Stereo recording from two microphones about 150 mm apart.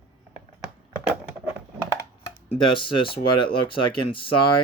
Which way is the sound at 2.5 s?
35° left (ahead or behind).